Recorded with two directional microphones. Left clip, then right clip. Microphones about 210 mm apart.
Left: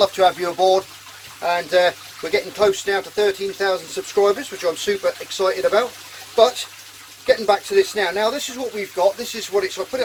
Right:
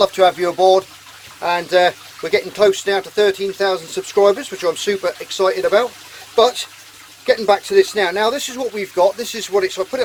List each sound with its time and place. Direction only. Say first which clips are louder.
0.0 s speech: right 3 dB; 35° right (ahead or behind)
1.4 s speech: right 2 dB; 55° right (ahead or behind)